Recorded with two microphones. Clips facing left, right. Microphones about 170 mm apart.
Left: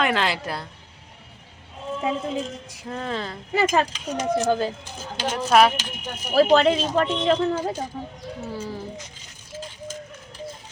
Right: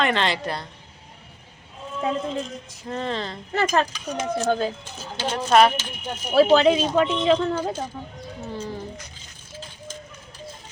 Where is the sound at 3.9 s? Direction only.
20° left (ahead or behind).